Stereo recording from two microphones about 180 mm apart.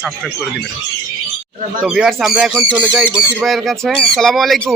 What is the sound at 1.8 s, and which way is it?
Speech, centre (ahead or behind).